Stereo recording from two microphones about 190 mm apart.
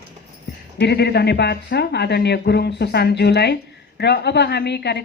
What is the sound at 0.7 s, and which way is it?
A woman's voice, 60° left (ahead or behind).